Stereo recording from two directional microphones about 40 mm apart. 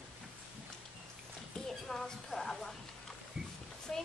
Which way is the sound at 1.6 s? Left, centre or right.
Centre.